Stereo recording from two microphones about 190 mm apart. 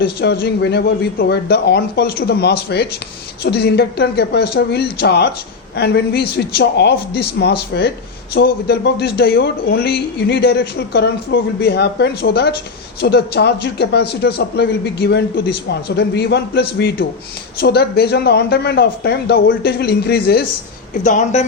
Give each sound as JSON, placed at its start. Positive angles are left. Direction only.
{"t": 0.0, "sound": "speech", "side_deg": 55}
{"t": 21.0, "sound": "speech", "side_deg": 40}